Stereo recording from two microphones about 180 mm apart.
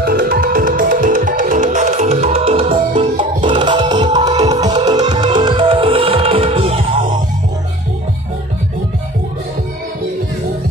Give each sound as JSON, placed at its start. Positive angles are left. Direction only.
{"t": 0.0, "sound": "music", "side_deg": -55}